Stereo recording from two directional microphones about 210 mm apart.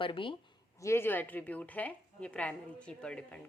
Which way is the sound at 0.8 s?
10° left (ahead or behind).